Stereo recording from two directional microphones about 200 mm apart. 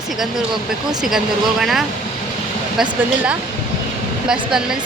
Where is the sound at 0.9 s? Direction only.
Centre (ahead or behind).